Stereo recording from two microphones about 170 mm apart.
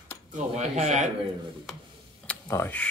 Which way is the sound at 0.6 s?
45° right (ahead or behind).